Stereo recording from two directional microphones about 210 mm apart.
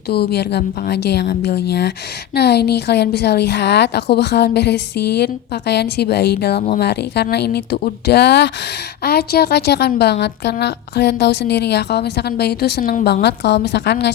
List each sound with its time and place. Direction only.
0.1 s a woman's voice: 50° left (ahead or behind)
13.2 s a woman's voice: 55° left (ahead or behind)